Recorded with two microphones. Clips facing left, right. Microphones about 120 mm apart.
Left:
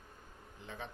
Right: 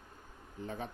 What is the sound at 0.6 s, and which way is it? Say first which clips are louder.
Speech: right 6 dB; 45° right (ahead or behind).